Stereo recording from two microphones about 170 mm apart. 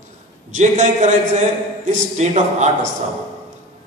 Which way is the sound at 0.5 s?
45° right (ahead or behind).